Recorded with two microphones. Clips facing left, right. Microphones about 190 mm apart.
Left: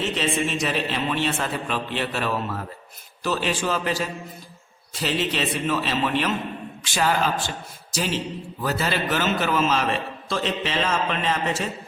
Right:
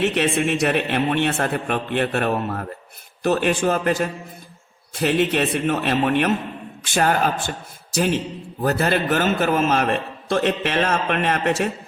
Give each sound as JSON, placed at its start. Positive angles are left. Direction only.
{"t": 0.0, "sound": "a man's voice", "side_deg": -65}